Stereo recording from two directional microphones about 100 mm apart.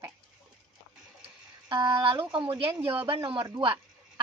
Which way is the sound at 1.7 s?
50° right (ahead or behind).